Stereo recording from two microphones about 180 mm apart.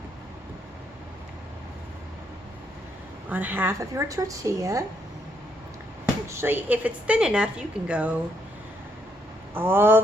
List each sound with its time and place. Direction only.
3.2 s a woman's voice: 10° right (ahead or behind)
6.2 s a woman's voice: 15° right (ahead or behind)
9.6 s a woman's voice: 10° right (ahead or behind)